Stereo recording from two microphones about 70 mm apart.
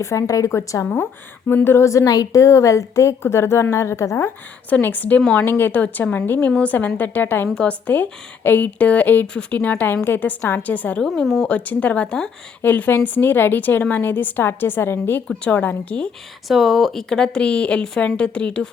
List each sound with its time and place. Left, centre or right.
0.0 s a woman's voice: left
1.5 s speech: left
1.8 s a woman's voice: left
4.7 s a woman's voice: left
5.2 s a woman's voice: centre
5.5 s a woman's voice: left
7.4 s a woman's voice: centre
11.0 s speech: centre
11.4 s a woman's voice: left
15.4 s a woman's voice: left
16.5 s a woman's voice: centre